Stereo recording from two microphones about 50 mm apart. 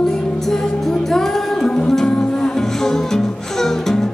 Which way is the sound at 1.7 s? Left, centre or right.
Left.